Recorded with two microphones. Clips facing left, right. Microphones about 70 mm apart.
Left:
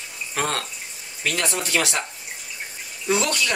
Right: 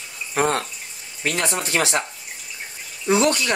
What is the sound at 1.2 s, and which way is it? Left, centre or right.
Speech, right.